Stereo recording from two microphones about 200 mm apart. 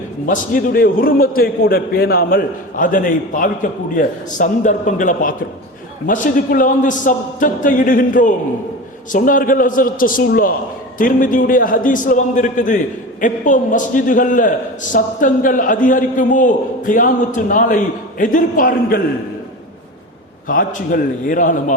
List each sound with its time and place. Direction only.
0.3 s a man's voice: 45° left (ahead or behind)
20.5 s a man's voice: 45° left (ahead or behind)